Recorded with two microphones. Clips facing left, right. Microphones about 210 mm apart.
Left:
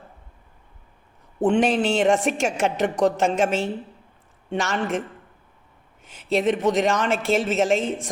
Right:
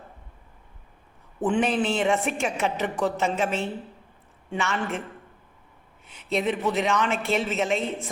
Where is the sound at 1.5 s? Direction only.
80° left.